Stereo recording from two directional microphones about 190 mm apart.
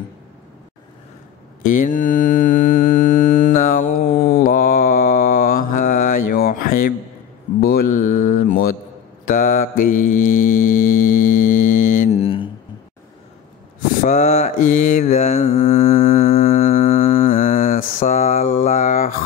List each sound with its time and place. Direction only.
1.6 s mantra: 45° left (ahead or behind); by 12.4 s 30° left (ahead or behind)
14.0 s mantra: 35° left (ahead or behind)
16.2 s a sound: 50° left (ahead or behind)